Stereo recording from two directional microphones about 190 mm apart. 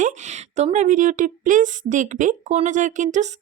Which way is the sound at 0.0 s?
40° right (ahead or behind).